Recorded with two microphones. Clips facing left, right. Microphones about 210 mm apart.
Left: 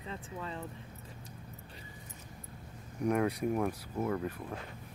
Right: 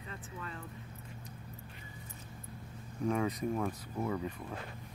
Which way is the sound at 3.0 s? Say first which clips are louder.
Left 2 dB; 10° left (ahead or behind).